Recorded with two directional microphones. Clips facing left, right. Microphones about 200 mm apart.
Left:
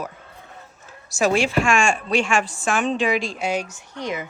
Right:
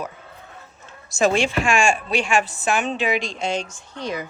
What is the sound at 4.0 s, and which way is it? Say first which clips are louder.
Speech: even; 20° left (ahead or behind).